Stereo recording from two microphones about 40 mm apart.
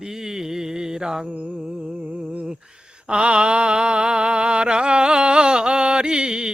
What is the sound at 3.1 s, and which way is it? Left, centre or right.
Mantra, right.